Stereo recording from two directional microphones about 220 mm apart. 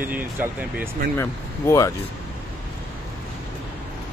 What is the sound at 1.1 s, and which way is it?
Speech, 10° left (ahead or behind).